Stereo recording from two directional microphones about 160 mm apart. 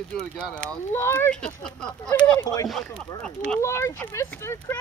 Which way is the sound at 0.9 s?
15° left (ahead or behind).